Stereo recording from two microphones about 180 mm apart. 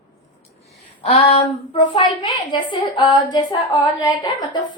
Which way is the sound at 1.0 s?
35° left (ahead or behind).